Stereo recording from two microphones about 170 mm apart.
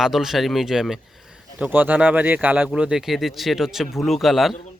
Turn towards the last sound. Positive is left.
turn(degrees=0)  # may be behind; listen again after turning